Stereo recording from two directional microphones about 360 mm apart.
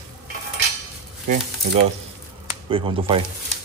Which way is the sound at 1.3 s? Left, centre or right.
Right.